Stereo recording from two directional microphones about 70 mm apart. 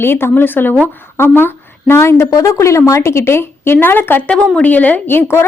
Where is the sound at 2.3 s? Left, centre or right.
Left.